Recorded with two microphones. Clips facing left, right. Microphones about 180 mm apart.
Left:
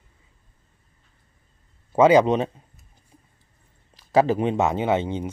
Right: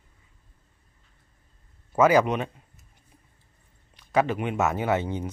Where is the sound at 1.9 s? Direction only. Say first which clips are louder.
Left 4 dB; 25° left (ahead or behind).